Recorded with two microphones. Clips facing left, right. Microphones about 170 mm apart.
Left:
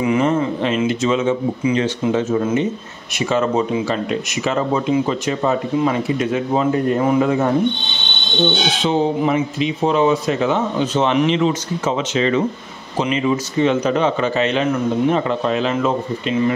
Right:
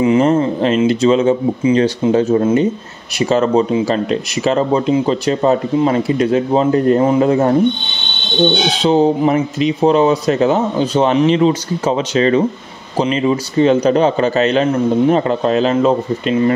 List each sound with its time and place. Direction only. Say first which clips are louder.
0.0 s speech: right 5 dB; 30° right (ahead or behind)
8.8 s speech: right 5 dB; 35° right (ahead or behind)